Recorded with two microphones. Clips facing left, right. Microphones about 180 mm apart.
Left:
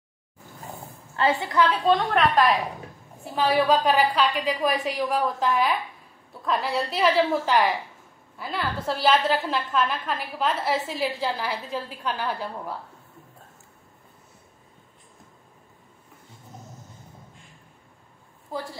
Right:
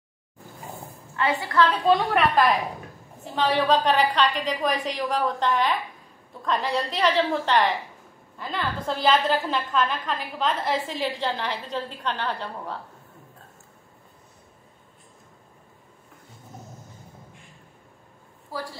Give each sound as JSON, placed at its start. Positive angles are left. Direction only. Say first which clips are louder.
{"t": 1.1, "sound": "a woman's voice", "louder": "left 1 dB", "side_deg": 25}
{"t": 1.9, "sound": "a woman's voice", "louder": "even", "side_deg": -10}
{"t": 3.3, "sound": "a woman's voice", "louder": "left 1 dB", "side_deg": 5}
{"t": 18.5, "sound": "a woman's voice", "louder": "left 1 dB", "side_deg": 20}